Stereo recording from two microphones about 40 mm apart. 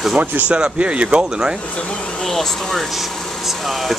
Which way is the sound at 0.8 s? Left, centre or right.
Right.